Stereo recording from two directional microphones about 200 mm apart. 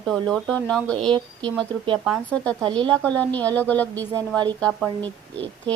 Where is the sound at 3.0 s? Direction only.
5° left (ahead or behind).